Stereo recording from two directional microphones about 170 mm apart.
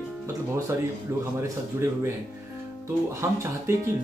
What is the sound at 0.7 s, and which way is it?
Speech, 15° right (ahead or behind).